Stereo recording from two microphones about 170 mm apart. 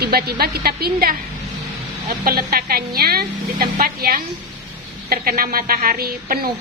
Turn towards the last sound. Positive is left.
turn(degrees=-60)  # may be behind; listen again after turning